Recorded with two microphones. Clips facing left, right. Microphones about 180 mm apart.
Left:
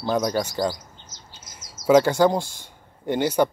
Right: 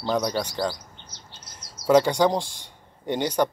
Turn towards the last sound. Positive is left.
turn(degrees=10)  # may be behind; listen again after turning